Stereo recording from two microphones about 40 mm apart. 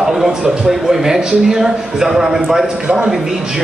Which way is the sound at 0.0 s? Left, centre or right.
Centre.